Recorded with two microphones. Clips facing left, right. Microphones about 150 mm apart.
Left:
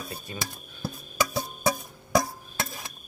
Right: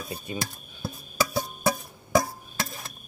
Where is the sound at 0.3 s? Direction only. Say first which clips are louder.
Right 5 dB; 15° right (ahead or behind).